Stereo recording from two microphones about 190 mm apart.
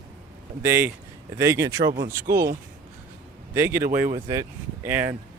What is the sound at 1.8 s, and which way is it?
Speech, 50° right (ahead or behind).